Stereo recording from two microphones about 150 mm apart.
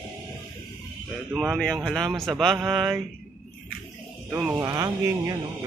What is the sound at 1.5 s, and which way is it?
Speech, 5° left (ahead or behind).